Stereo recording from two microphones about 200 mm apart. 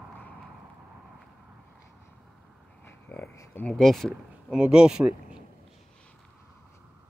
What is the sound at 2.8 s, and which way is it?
Speech, 10° left (ahead or behind).